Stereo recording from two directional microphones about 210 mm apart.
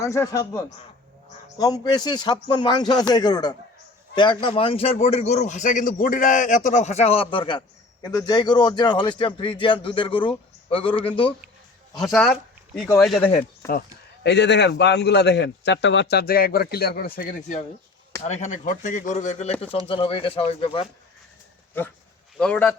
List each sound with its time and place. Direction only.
0.0 s a man's voice: 15° left (ahead or behind)
11.9 s speech: centre (ahead or behind)
13.6 s a man's voice: 15° left (ahead or behind)
14.3 s a man's voice: 55° left (ahead or behind); by 20.8 s 25° left (ahead or behind)
22.4 s speech: 5° left (ahead or behind)